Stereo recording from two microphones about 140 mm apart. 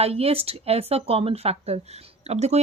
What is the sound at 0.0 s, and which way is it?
Speech, 45° right (ahead or behind).